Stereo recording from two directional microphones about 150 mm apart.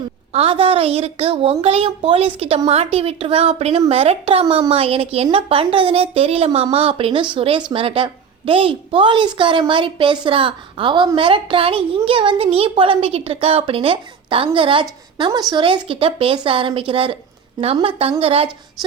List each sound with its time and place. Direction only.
0.3 s a woman's voice: 40° right (ahead or behind)